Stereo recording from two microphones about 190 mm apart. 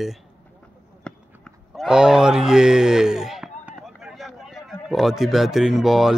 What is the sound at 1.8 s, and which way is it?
Speech, 5° right (ahead or behind).